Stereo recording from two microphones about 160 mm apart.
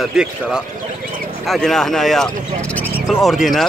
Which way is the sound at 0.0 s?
5° right (ahead or behind).